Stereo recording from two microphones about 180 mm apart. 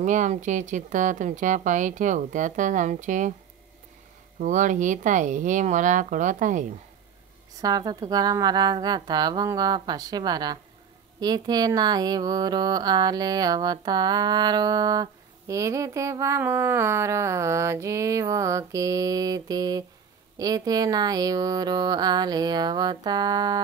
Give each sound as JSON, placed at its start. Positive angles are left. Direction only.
{"t": 0.0, "sound": "speech", "side_deg": -45}
{"t": 4.4, "sound": "speech", "side_deg": -45}
{"t": 7.6, "sound": "speech", "side_deg": -20}